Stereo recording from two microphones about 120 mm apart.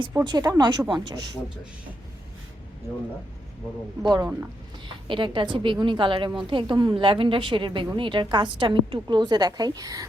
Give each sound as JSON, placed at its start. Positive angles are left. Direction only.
{"t": 0.3, "sound": "speech", "side_deg": -35}
{"t": 4.0, "sound": "a woman's voice", "side_deg": -35}